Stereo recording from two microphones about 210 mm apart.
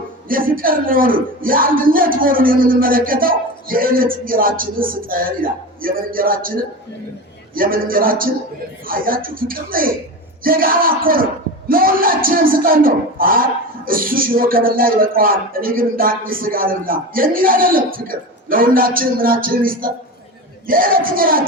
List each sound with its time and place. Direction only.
0.3 s speech: 40° right (ahead or behind)